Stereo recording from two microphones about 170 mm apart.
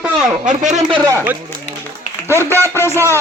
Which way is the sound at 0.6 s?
45° right (ahead or behind).